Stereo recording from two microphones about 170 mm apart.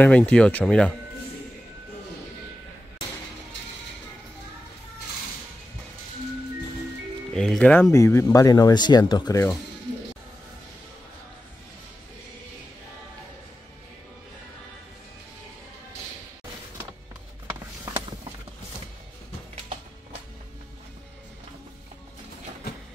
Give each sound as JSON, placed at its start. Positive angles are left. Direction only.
{"t": 0.0, "sound": "speech", "side_deg": 10}
{"t": 7.3, "sound": "speech", "side_deg": 5}
{"t": 7.9, "sound": "speech", "side_deg": 15}